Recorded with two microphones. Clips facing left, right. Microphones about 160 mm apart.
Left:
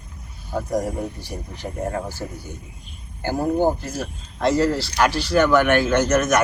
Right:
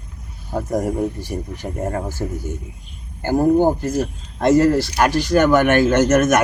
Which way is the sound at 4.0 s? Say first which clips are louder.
Right 5 dB; 45° right (ahead or behind).